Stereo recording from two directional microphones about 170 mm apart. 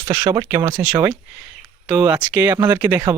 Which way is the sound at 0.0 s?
15° right (ahead or behind).